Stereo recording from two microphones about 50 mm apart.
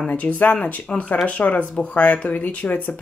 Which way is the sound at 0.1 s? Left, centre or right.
Left.